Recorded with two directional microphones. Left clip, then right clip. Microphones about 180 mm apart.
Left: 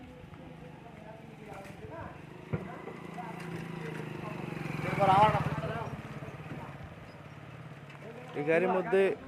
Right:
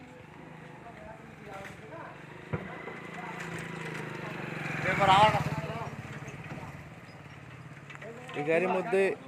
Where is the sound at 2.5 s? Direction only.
65° left (ahead or behind).